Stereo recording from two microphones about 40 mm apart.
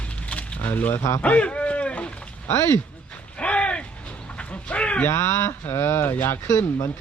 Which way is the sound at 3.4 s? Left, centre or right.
Left.